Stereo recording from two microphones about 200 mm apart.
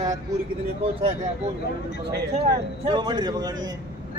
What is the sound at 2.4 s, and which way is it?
A man's voice, 20° right (ahead or behind).